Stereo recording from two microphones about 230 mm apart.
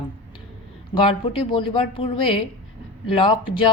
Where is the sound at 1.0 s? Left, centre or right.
Left.